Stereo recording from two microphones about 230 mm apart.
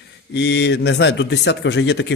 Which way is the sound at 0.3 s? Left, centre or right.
Left.